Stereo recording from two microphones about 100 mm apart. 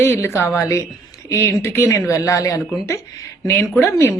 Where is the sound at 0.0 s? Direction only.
25° left (ahead or behind).